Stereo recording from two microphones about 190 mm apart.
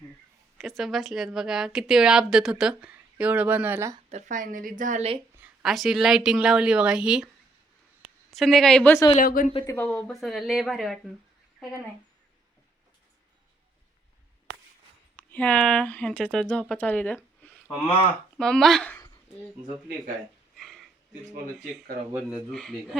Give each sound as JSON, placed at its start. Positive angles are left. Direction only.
{"t": 0.6, "sound": "a woman's voice", "side_deg": 0}
{"t": 4.1, "sound": "speech", "side_deg": -45}
{"t": 5.6, "sound": "a woman's voice", "side_deg": 0}
{"t": 8.3, "sound": "a woman's voice", "side_deg": 0}
{"t": 9.2, "sound": "a woman's voice", "side_deg": 50}
{"t": 9.6, "sound": "a woman's voice", "side_deg": 10}
{"t": 15.1, "sound": "a woman's voice", "side_deg": 10}
{"t": 18.3, "sound": "a woman's voice", "side_deg": 5}
{"t": 20.6, "sound": "a sound", "side_deg": 0}
{"t": 22.5, "sound": "a woman's voice", "side_deg": 0}